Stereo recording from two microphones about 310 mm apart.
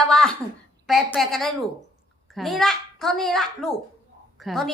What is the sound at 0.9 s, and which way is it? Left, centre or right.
A child's voice, centre.